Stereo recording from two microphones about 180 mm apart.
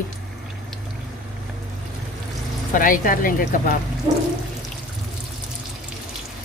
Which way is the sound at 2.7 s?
50° left (ahead or behind).